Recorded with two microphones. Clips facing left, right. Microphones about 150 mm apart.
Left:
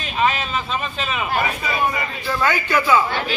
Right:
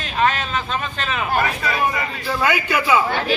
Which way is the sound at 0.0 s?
5° left (ahead or behind).